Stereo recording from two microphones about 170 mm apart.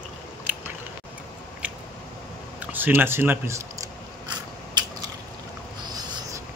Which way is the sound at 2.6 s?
10° right (ahead or behind).